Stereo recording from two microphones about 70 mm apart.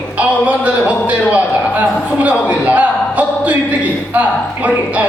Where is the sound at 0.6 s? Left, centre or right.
Right.